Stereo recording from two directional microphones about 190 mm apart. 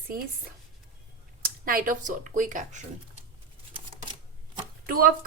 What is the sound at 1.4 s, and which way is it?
Speech, 50° right (ahead or behind).